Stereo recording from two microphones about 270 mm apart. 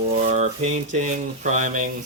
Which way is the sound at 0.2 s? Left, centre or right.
Right.